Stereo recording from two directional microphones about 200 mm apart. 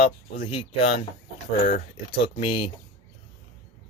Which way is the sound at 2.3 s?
25° left (ahead or behind).